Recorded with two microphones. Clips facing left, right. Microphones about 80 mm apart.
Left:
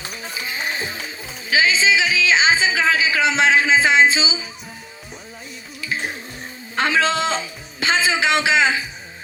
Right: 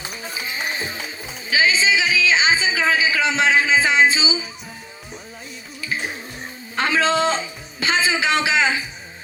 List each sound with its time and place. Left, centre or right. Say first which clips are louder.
0.5 s music: left 1 dB; left
7.0 s music: right 2 dB; right
7.8 s a sound: left 1 dB; left